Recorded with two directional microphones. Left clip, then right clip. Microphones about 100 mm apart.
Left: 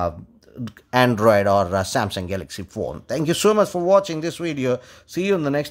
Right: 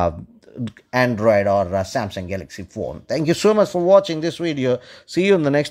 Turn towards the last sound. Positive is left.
turn(degrees=-30)  # may be behind; listen again after turning